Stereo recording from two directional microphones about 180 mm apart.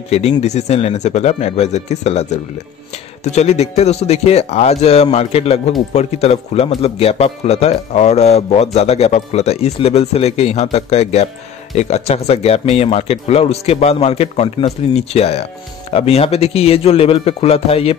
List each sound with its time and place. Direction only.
0.1 s speech: 35° left (ahead or behind)